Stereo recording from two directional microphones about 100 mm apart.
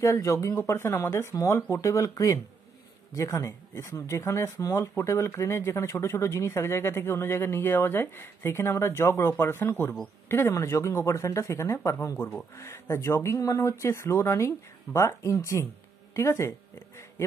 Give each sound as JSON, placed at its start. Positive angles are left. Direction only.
{"t": 0.0, "sound": "speech", "side_deg": 30}